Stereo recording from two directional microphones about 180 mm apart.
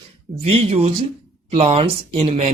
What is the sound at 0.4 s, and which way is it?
A man's voice, 35° right (ahead or behind).